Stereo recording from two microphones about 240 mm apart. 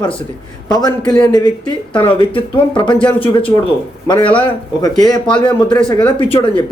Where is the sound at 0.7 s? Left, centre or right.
Centre.